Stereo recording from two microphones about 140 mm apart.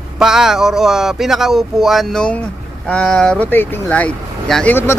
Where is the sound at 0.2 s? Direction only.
5° right (ahead or behind).